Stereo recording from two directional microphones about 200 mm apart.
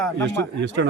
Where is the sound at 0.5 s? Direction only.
65° right (ahead or behind).